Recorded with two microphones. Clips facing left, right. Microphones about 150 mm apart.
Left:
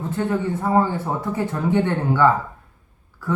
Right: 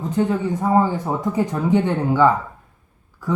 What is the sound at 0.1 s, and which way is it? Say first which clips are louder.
Speech: right 3 dB; 15° right (ahead or behind).